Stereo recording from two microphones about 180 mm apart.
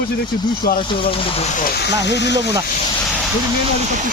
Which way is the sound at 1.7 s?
70° left (ahead or behind).